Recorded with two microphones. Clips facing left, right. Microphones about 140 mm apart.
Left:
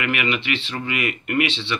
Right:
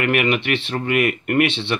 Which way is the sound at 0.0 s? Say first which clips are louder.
Right 5 dB; 55° right (ahead or behind).